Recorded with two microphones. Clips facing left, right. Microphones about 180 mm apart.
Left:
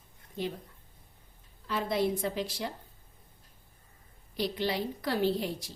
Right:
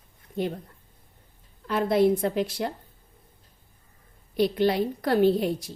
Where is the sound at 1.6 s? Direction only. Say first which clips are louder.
Right 8 dB; 55° right (ahead or behind).